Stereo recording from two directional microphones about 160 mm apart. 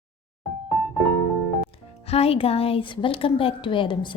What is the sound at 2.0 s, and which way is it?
A woman's voice, 40° left (ahead or behind).